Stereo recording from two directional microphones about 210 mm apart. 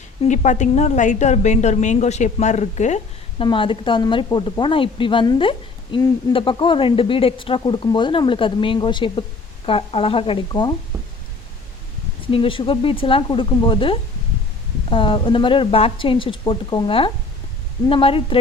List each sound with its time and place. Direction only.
0.2 s a woman's voice: 35° left (ahead or behind)
12.3 s speech: 25° left (ahead or behind)